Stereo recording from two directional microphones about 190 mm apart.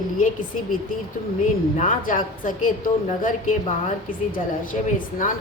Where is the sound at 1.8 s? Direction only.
45° left (ahead or behind).